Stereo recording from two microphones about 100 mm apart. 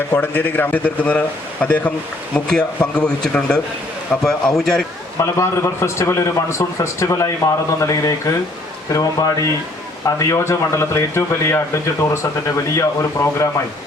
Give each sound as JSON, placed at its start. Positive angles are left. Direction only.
{"t": 0.1, "sound": "a man's voice", "side_deg": 20}
{"t": 5.2, "sound": "speech", "side_deg": 30}